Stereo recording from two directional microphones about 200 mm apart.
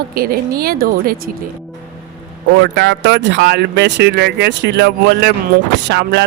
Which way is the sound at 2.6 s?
60° right (ahead or behind).